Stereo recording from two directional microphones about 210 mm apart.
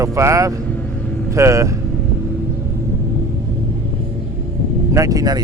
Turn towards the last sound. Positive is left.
turn(degrees=-15)  # may be behind; listen again after turning